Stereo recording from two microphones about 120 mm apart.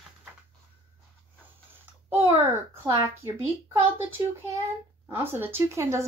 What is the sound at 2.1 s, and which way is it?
Speech, 15° right (ahead or behind).